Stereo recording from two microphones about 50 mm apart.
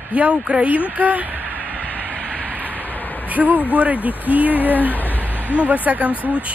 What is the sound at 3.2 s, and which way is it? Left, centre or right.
Speech, right.